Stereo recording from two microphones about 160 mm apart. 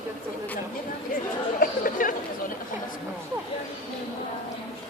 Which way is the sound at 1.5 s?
60° left (ahead or behind).